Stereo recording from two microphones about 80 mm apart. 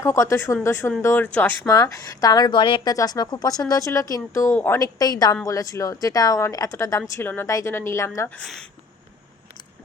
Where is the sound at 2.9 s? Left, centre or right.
Left.